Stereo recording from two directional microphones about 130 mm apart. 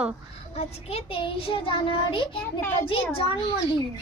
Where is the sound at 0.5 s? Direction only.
50° left (ahead or behind).